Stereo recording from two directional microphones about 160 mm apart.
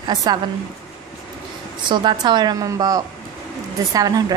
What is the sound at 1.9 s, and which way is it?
A woman's voice, 30° right (ahead or behind).